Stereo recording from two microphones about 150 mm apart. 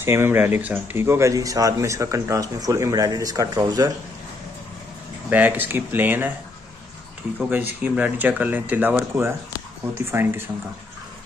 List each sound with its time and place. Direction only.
0.0 s speech: 15° right (ahead or behind)
5.3 s speech: 10° right (ahead or behind)
7.3 s speech: 10° right (ahead or behind)